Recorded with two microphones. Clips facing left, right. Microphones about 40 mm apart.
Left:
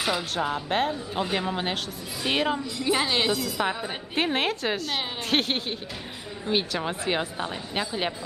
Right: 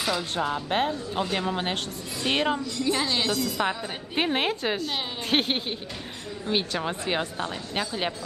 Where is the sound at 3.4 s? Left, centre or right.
Centre.